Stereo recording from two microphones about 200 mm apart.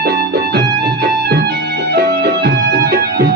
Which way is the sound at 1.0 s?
55° right (ahead or behind).